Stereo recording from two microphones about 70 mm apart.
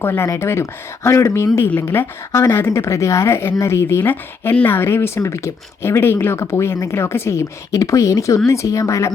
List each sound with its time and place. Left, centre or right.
0.0 s speech: left
4.0 s a woman's voice: left